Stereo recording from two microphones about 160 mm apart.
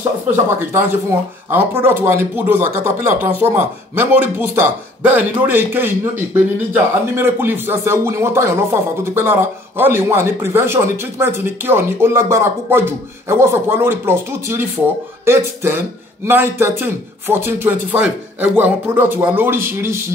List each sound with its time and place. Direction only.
0.3 s speech: 15° right (ahead or behind)